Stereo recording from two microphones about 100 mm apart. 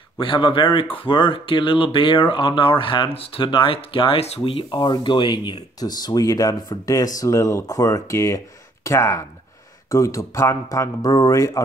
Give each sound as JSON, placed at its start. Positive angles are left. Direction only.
{"t": 0.2, "sound": "speech", "side_deg": 55}
{"t": 4.6, "sound": "speech", "side_deg": 45}